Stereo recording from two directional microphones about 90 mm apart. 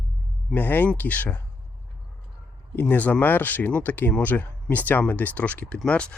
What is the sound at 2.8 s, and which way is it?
Speech, 20° left (ahead or behind).